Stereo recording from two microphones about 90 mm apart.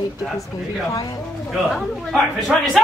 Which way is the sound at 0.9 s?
40° left (ahead or behind).